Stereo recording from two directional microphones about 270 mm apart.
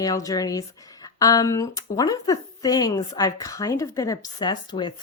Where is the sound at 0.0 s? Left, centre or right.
Centre.